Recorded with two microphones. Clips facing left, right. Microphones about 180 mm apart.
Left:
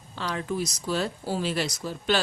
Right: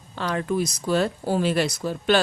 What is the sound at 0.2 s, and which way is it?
Speech, 55° right (ahead or behind).